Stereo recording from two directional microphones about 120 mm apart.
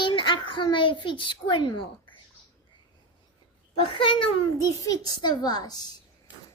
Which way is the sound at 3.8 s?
45° left (ahead or behind).